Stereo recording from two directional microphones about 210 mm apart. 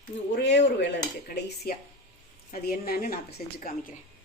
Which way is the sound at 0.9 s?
45° left (ahead or behind).